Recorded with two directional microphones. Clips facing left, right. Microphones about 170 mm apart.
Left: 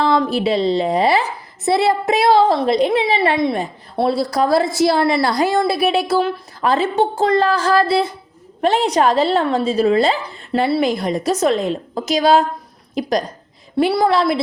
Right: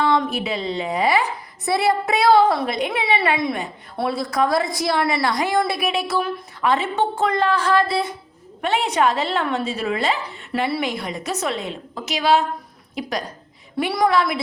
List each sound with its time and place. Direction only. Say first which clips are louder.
0.0 s a woman's voice: left 4 dB; 30° left (ahead or behind)